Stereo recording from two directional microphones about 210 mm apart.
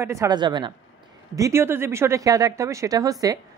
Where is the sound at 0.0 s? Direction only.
15° right (ahead or behind).